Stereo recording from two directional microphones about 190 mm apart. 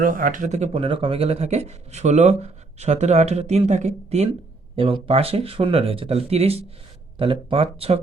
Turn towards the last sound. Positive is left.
turn(degrees=-30)  # may be behind; listen again after turning